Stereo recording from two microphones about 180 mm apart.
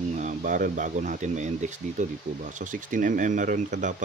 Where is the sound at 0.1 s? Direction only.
45° right (ahead or behind).